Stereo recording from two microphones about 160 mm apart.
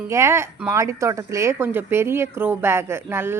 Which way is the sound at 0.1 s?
15° right (ahead or behind).